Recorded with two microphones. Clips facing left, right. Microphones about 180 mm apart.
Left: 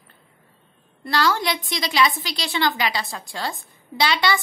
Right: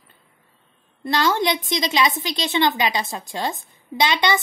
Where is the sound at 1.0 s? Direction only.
20° right (ahead or behind).